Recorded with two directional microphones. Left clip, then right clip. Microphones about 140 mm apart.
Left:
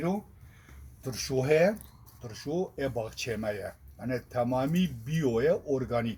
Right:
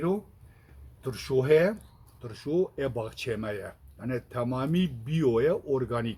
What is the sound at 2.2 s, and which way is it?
Speech, 40° right (ahead or behind).